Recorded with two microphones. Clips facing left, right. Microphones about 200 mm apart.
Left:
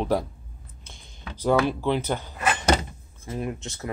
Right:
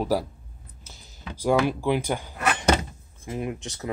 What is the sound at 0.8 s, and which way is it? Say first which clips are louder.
Speech: right 1 dB; 5° right (ahead or behind).